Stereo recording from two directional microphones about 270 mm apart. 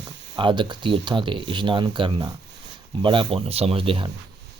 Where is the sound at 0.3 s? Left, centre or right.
Centre.